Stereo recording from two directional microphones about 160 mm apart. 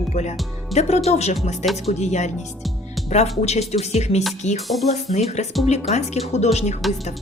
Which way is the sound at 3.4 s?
40° left (ahead or behind).